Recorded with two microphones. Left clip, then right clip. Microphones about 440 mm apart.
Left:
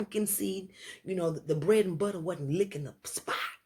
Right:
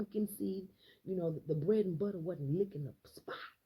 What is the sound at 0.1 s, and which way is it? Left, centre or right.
Speech, left.